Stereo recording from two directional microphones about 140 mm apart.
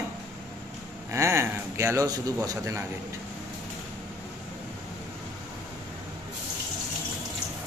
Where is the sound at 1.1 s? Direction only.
20° right (ahead or behind).